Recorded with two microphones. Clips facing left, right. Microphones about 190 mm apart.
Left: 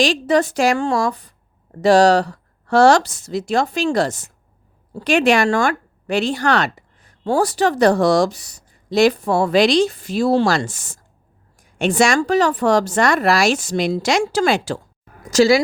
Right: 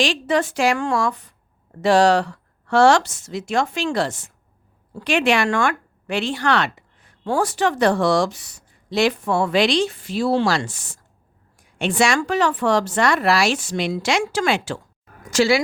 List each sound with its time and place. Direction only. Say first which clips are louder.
0.0 s a woman's voice: left 4 dB; 40° left (ahead or behind)